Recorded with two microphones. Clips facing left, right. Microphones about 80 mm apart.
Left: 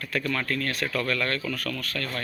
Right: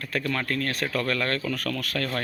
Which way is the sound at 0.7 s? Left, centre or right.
Right.